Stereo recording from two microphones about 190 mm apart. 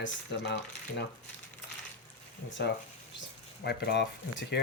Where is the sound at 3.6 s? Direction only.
60° left (ahead or behind).